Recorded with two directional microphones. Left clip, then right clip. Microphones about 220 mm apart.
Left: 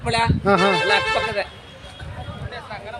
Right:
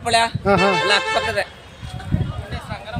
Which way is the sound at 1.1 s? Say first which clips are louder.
Right 2 dB; 50° right (ahead or behind).